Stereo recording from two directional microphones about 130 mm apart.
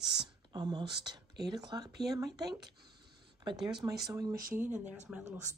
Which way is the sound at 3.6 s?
30° right (ahead or behind).